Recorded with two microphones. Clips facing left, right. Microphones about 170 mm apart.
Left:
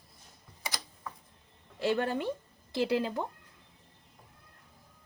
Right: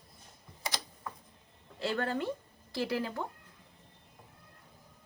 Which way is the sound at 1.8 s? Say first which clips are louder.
Left 3 dB; 15° left (ahead or behind).